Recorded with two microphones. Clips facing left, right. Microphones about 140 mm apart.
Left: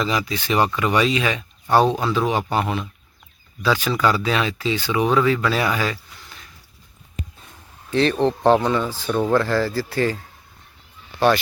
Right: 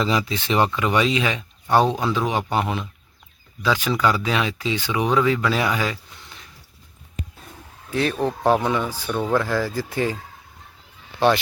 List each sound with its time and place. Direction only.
0.0 s speech: 25° right (ahead or behind)
7.9 s speech: 5° right (ahead or behind)
9.0 s speech: 10° left (ahead or behind)
9.3 s speech: 10° right (ahead or behind)
11.2 s speech: 20° right (ahead or behind)